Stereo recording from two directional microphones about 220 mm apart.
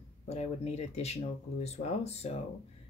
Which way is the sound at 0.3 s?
30° left (ahead or behind).